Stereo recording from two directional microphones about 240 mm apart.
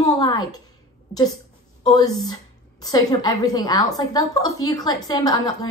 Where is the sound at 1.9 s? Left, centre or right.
Centre.